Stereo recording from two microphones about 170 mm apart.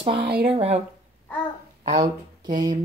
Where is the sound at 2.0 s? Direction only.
25° right (ahead or behind).